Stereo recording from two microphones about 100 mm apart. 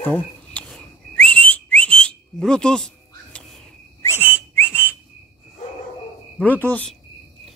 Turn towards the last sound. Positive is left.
turn(degrees=15)  # may be behind; listen again after turning